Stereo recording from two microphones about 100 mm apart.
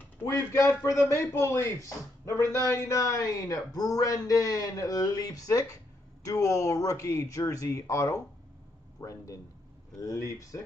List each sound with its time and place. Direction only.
0.2 s a man's voice: 30° left (ahead or behind)